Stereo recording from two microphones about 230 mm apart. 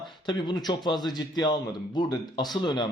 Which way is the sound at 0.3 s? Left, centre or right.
Centre.